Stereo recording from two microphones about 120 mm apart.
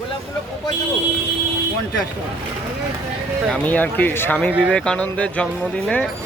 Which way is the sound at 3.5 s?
15° left (ahead or behind).